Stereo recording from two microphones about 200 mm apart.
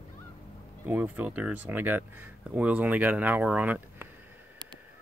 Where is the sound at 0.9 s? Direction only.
10° right (ahead or behind).